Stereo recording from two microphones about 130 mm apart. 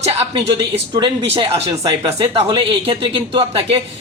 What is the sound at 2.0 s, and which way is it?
Speech, 45° right (ahead or behind).